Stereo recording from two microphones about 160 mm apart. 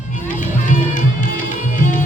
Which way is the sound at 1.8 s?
55° left (ahead or behind).